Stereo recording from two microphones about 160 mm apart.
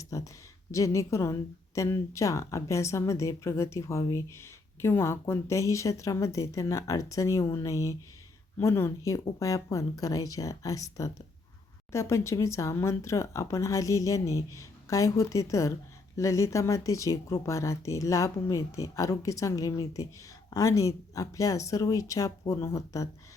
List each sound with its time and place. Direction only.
0.0 s a woman's voice: 20° left (ahead or behind)